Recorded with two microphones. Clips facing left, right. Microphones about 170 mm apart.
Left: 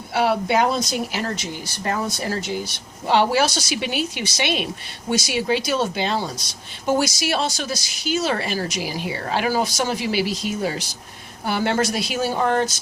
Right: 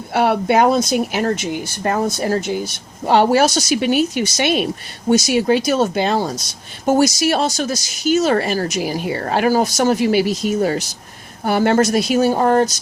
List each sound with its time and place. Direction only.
0.1 s speech: 55° right (ahead or behind)